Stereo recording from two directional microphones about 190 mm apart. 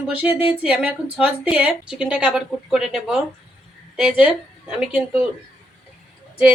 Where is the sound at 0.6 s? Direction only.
5° right (ahead or behind).